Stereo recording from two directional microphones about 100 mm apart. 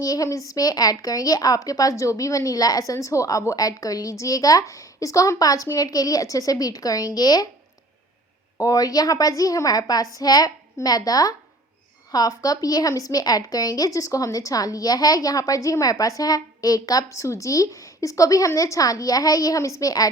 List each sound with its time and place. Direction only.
0.0 s a woman's voice: 35° left (ahead or behind)
8.6 s a woman's voice: 40° left (ahead or behind)